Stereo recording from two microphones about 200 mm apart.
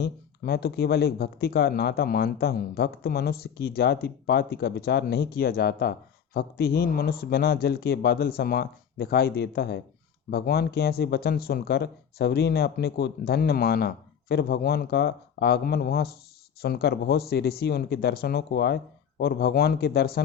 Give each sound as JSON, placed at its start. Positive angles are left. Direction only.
{"t": 0.0, "sound": "speech", "side_deg": 50}